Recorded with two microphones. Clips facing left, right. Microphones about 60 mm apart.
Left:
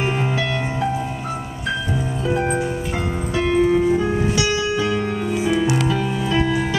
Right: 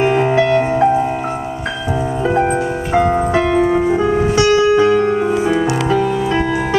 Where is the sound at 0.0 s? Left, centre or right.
Right.